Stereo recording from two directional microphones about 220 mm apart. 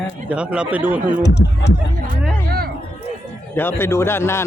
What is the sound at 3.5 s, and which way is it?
Speech, 10° left (ahead or behind).